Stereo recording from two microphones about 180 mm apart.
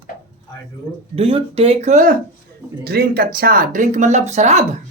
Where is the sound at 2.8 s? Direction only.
60° right (ahead or behind); by 4.6 s 40° right (ahead or behind).